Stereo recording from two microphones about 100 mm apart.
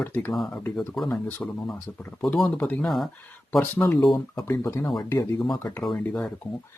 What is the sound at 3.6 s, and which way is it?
Speech, 25° left (ahead or behind).